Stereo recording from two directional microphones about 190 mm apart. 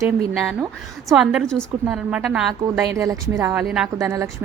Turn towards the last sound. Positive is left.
turn(degrees=-15)  # may be behind; listen again after turning